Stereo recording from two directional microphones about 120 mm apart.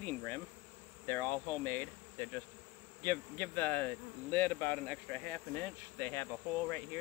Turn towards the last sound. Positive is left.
turn(degrees=20)  # may be behind; listen again after turning